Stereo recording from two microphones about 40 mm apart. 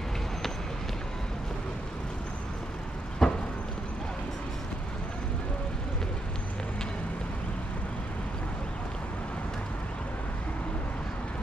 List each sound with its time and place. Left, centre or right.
3.2 s vehicle: centre